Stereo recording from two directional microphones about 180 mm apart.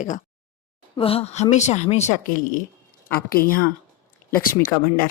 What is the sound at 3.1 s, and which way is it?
Speech, 55° left (ahead or behind).